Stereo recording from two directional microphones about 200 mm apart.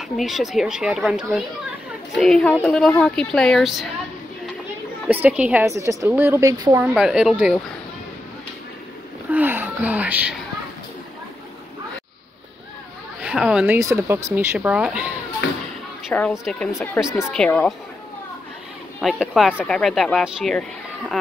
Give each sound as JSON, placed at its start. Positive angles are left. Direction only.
{"t": 0.0, "sound": "speech", "side_deg": 0}
{"t": 5.0, "sound": "a woman's voice", "side_deg": -5}
{"t": 6.9, "sound": "speech", "side_deg": -5}
{"t": 9.3, "sound": "a sound", "side_deg": -10}
{"t": 13.2, "sound": "a woman's voice", "side_deg": -5}
{"t": 16.1, "sound": "speech", "side_deg": 5}
{"t": 18.9, "sound": "speech", "side_deg": 0}